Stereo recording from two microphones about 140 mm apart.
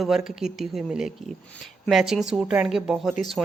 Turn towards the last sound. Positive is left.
turn(degrees=0)  # may be behind; listen again after turning